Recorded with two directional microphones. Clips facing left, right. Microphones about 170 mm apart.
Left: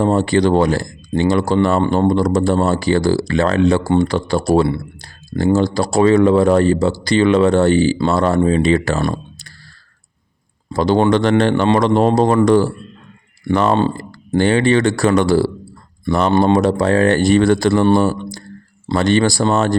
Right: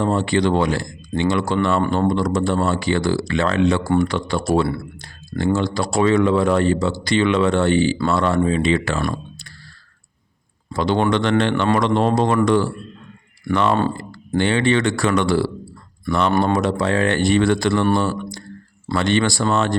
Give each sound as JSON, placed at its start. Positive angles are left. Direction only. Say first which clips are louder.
{"t": 0.0, "sound": "speech", "louder": "left 4 dB", "side_deg": 40}
{"t": 10.7, "sound": "speech", "louder": "left 5 dB", "side_deg": 35}